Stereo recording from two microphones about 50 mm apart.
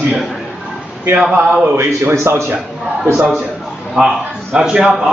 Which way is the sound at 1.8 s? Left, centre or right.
Right.